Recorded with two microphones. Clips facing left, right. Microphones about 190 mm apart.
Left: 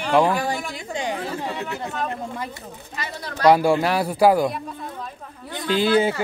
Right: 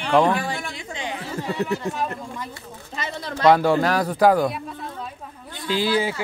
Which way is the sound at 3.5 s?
10° left (ahead or behind).